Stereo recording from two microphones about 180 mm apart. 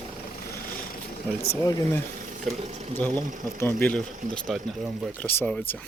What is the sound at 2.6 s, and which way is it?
Speech, 40° right (ahead or behind).